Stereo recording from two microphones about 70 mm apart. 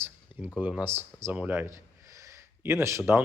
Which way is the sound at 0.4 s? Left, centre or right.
Right.